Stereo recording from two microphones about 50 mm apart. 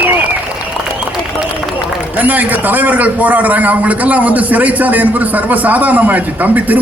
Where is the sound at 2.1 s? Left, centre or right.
Right.